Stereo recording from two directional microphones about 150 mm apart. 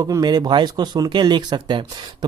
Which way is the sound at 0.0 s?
25° right (ahead or behind).